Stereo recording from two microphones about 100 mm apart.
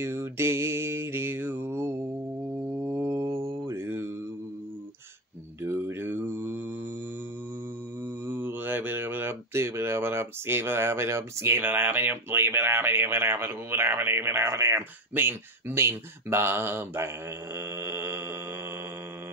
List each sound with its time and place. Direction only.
0.0 s mantra: 25° right (ahead or behind)
5.6 s mantra: 25° right (ahead or behind)
8.3 s speech: 20° right (ahead or behind)
17.6 s mantra: 25° right (ahead or behind)